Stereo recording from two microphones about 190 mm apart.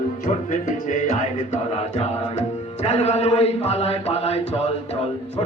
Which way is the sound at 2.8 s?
35° left (ahead or behind).